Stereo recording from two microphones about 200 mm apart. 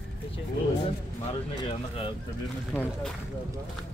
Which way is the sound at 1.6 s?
30° left (ahead or behind).